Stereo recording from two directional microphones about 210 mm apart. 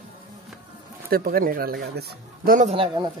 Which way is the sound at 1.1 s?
45° right (ahead or behind).